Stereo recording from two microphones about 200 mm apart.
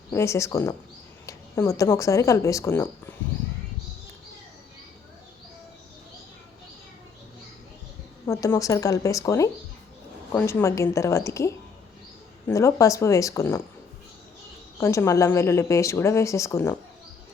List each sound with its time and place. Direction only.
0.1 s speech: 15° left (ahead or behind)
8.3 s speech: 15° left (ahead or behind)
14.8 s speech: 15° left (ahead or behind)